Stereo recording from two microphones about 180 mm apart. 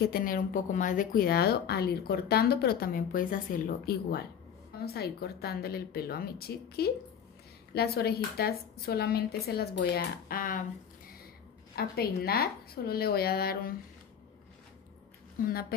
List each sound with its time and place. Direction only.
0.1 s a woman's voice: 50° left (ahead or behind)
11.7 s a woman's voice: 60° left (ahead or behind)